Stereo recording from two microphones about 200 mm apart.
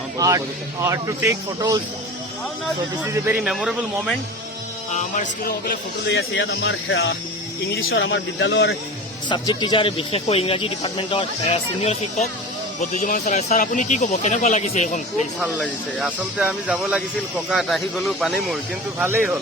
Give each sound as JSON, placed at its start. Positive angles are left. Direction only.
{"t": 0.2, "sound": "speech", "side_deg": -15}
{"t": 3.2, "sound": "speech", "side_deg": -5}
{"t": 4.9, "sound": "speech", "side_deg": 40}
{"t": 6.1, "sound": "speech", "side_deg": 65}
{"t": 9.3, "sound": "speech", "side_deg": 20}
{"t": 15.4, "sound": "speech", "side_deg": -5}
{"t": 18.9, "sound": "speech", "side_deg": -10}